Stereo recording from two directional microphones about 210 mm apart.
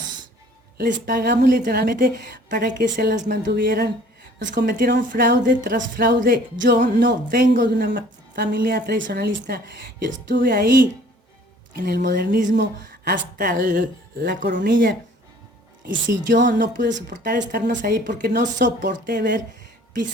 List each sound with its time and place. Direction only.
0.8 s a woman's voice: 55° right (ahead or behind)
5.5 s a woman's voice: 40° right (ahead or behind)
14.5 s speech: 60° right (ahead or behind)
16.6 s speech: 55° right (ahead or behind)
17.1 s a woman's voice: 45° right (ahead or behind)